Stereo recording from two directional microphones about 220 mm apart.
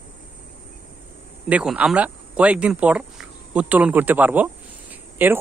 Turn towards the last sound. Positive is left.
turn(degrees=-10)  # may be behind; listen again after turning